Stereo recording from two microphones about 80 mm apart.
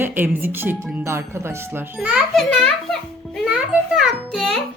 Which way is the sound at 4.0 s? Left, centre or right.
Centre.